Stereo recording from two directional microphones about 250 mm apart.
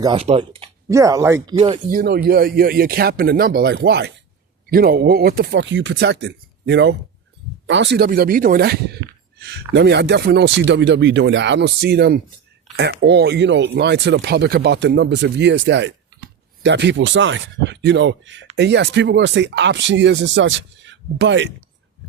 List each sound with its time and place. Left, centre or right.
0.0 s speech: right
0.9 s speech: centre
1.9 s speech: right